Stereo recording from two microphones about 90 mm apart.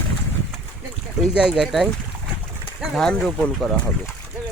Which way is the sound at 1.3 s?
10° right (ahead or behind).